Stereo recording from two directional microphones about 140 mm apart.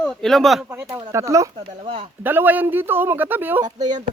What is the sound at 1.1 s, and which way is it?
Speech, 20° right (ahead or behind).